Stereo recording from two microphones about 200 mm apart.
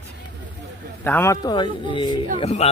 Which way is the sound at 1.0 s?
10° left (ahead or behind).